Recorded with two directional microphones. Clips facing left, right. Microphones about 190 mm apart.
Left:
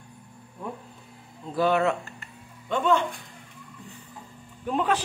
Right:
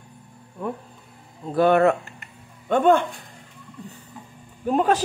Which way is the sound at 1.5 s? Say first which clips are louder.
Right 6 dB; 55° right (ahead or behind).